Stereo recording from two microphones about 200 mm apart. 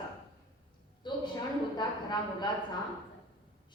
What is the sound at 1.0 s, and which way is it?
A woman's voice, 20° left (ahead or behind).